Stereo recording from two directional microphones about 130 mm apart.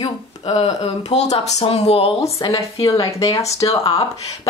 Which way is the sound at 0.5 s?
60° left (ahead or behind).